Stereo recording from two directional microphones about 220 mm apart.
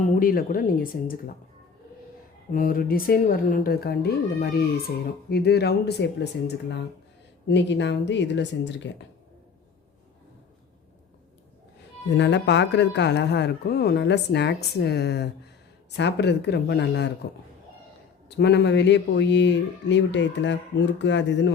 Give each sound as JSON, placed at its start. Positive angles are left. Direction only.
{"t": 0.2, "sound": "speech", "side_deg": 40}
{"t": 2.5, "sound": "speech", "side_deg": 40}
{"t": 7.4, "sound": "speech", "side_deg": 55}
{"t": 12.1, "sound": "speech", "side_deg": 55}
{"t": 18.3, "sound": "speech", "side_deg": 50}